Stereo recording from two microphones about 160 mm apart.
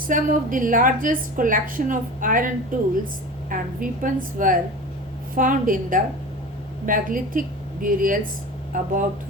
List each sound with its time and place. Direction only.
0.1 s a woman's voice: 55° right (ahead or behind)
3.5 s a woman's voice: 55° right (ahead or behind)